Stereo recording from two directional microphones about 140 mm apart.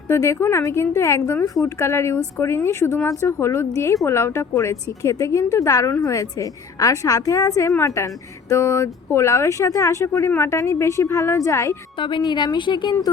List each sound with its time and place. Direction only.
0.1 s speech: 20° left (ahead or behind)
11.9 s a woman's voice: 35° left (ahead or behind)